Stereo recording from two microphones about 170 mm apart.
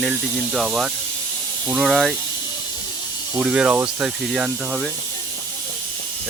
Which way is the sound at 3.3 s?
5° right (ahead or behind).